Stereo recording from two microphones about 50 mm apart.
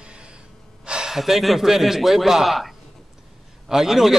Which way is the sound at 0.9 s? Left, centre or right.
Centre.